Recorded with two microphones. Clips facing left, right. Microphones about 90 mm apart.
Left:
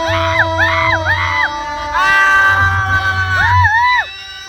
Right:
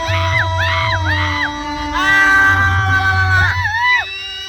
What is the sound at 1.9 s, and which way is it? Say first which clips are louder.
Music: left 3 dB; 10° left (ahead or behind).